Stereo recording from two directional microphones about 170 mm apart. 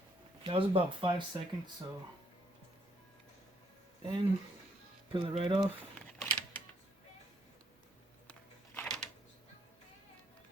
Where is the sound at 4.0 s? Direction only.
30° right (ahead or behind).